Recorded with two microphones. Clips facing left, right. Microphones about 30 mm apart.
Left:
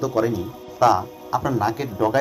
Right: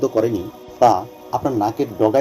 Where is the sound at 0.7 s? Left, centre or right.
Left.